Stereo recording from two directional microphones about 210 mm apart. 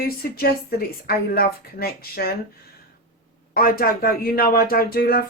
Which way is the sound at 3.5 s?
45° left (ahead or behind).